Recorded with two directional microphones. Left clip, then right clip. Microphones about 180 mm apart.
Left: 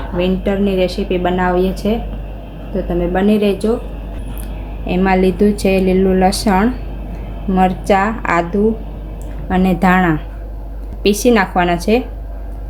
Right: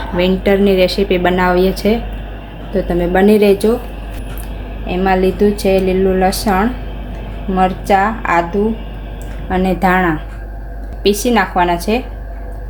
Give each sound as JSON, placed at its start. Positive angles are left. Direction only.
{"t": 0.2, "sound": "a woman's voice", "side_deg": -10}
{"t": 3.0, "sound": "a woman's voice", "side_deg": -10}
{"t": 4.9, "sound": "a woman's voice", "side_deg": 20}